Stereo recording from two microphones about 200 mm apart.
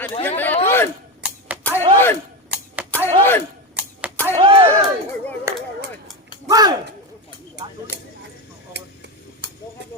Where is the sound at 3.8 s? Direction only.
5° right (ahead or behind).